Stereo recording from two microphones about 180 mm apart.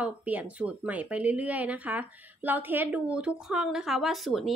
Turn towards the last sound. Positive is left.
turn(degrees=0)  # may be behind; listen again after turning